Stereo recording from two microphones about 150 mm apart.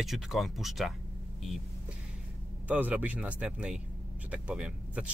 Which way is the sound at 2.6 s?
10° right (ahead or behind).